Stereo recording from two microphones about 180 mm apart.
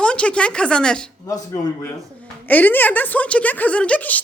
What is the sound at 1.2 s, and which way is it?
A man's voice, 20° left (ahead or behind).